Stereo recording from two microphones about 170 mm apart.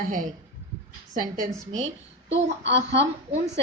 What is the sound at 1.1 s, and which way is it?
Speech, 50° right (ahead or behind).